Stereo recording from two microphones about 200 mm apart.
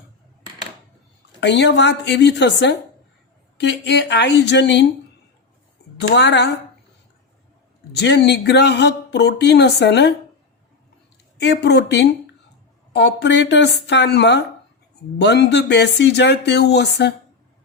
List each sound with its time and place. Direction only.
1.4 s speech: 60° left (ahead or behind)
6.0 s speech: 60° left (ahead or behind)
7.9 s speech: 55° left (ahead or behind)
11.3 s speech: 60° left (ahead or behind)